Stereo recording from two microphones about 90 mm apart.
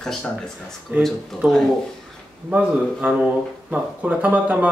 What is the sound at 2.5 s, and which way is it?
Speech, 15° right (ahead or behind).